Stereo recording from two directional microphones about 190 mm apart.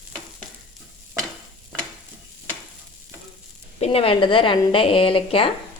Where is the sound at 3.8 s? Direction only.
30° left (ahead or behind).